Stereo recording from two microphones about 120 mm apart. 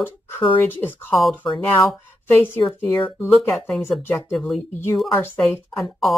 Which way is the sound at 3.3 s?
Centre (ahead or behind).